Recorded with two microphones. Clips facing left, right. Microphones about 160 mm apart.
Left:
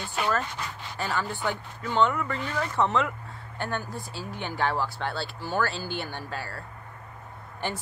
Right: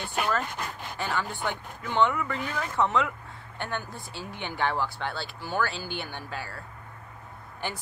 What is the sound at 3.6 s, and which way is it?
Speech, 20° right (ahead or behind).